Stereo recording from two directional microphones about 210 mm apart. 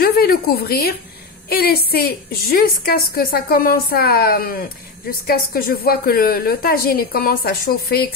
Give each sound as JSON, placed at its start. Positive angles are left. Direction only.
{"t": 0.0, "sound": "a woman's voice", "side_deg": 45}